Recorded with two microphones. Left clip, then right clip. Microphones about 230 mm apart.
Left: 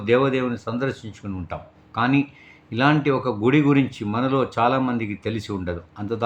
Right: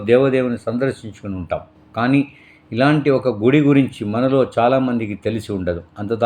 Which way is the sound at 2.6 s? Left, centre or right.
Centre.